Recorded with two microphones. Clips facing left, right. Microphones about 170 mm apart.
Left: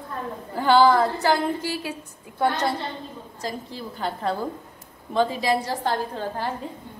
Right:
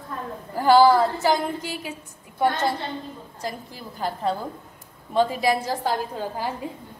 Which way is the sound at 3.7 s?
5° right (ahead or behind).